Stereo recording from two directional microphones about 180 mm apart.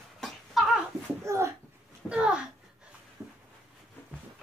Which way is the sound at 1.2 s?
15° right (ahead or behind).